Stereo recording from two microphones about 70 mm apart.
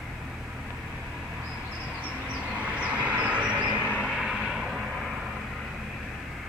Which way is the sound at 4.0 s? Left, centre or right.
Centre.